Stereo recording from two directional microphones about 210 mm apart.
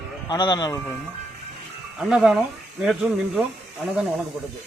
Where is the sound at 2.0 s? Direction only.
5° right (ahead or behind).